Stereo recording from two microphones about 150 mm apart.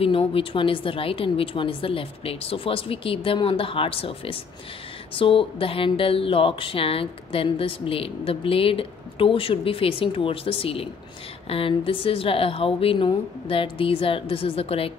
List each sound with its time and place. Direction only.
0.0 s speech: 40° left (ahead or behind)